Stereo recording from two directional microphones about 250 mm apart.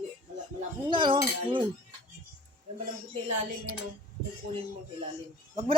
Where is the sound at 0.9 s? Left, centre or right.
Centre.